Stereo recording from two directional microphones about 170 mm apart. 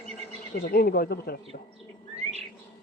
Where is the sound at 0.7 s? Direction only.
65° left (ahead or behind).